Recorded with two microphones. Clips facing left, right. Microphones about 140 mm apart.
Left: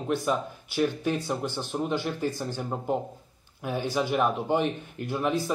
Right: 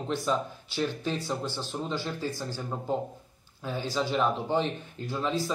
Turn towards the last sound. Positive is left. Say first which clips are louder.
# left 3 dB
turn(degrees=15)  # may be behind; listen again after turning